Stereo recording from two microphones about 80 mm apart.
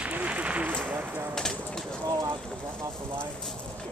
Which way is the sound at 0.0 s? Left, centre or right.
Centre.